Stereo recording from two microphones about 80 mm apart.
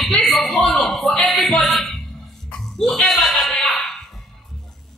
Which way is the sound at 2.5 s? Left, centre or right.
Centre.